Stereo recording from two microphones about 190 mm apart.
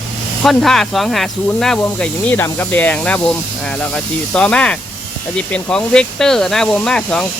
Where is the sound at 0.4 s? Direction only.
Centre (ahead or behind).